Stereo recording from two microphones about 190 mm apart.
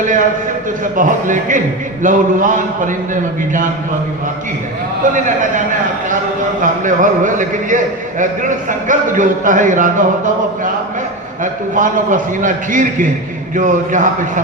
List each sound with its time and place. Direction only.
0.0 s a man's voice: 45° right (ahead or behind)
5.1 s a man's voice: 45° right (ahead or behind)
11.7 s a man's voice: 45° right (ahead or behind)